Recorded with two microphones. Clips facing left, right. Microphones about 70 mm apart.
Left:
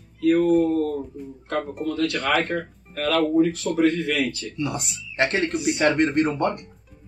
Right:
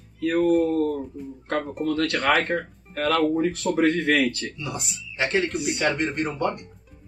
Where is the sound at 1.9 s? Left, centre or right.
Right.